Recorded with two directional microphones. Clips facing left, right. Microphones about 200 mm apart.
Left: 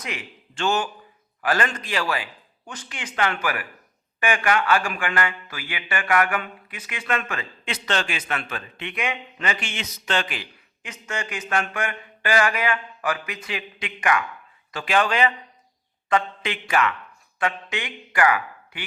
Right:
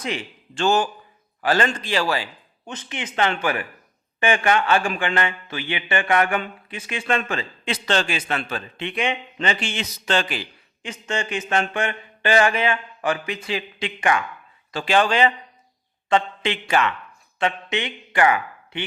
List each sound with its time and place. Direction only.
0.0 s speech: 30° right (ahead or behind)